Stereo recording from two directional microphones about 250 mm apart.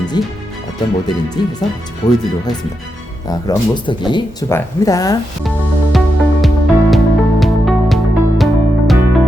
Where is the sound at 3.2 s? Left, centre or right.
Centre.